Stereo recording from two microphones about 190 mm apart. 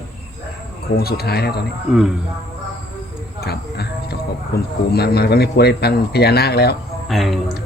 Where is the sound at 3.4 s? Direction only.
55° left (ahead or behind).